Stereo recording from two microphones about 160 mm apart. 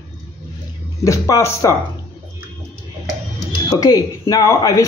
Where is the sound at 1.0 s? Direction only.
20° left (ahead or behind).